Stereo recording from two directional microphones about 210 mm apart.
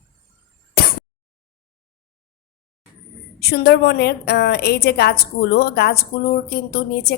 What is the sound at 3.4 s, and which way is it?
A woman's voice, 50° left (ahead or behind).